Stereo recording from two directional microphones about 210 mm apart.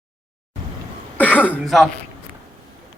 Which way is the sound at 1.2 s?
10° left (ahead or behind).